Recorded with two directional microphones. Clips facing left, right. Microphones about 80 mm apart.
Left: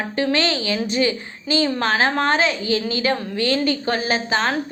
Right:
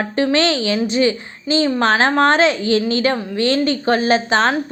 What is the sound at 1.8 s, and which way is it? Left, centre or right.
Speech, right.